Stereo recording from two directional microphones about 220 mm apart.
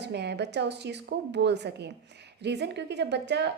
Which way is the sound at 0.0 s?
50° right (ahead or behind).